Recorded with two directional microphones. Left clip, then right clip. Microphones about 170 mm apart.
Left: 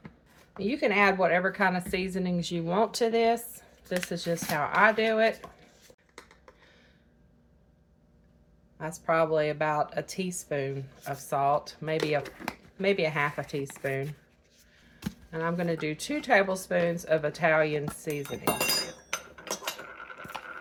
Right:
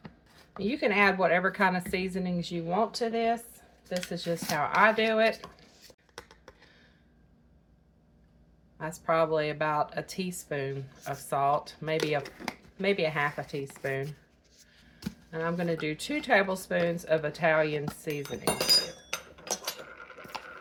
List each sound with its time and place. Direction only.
0.5 s speech: 5° left (ahead or behind)
2.3 s speech: 20° left (ahead or behind); by 4.1 s 35° left (ahead or behind)
4.1 s speech: 15° left (ahead or behind); by 5.3 s centre (ahead or behind)
8.8 s speech: centre (ahead or behind)
20.0 s coin: 15° left (ahead or behind)